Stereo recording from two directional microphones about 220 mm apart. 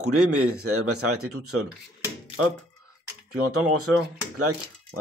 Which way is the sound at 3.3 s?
85° right.